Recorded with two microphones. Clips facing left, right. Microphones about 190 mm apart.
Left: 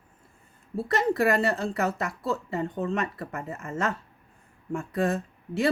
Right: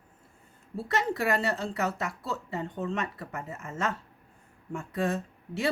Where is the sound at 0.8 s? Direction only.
55° left (ahead or behind).